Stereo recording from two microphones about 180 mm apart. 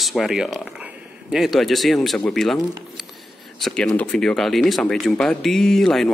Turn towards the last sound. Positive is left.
turn(degrees=0)  # may be behind; listen again after turning